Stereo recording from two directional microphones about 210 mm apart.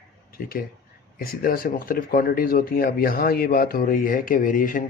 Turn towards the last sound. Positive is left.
turn(degrees=40)  # may be behind; listen again after turning